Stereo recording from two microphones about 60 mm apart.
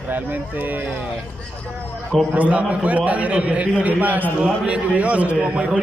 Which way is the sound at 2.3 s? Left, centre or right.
Right.